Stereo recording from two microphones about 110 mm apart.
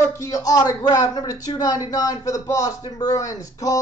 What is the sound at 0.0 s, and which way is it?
Speech, 30° left (ahead or behind).